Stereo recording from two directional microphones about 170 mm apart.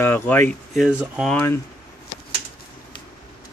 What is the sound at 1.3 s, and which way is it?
Speech, 15° left (ahead or behind).